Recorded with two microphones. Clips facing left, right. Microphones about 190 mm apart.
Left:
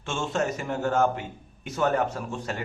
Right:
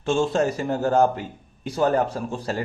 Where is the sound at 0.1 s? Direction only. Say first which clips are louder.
Right 7 dB; 35° right (ahead or behind).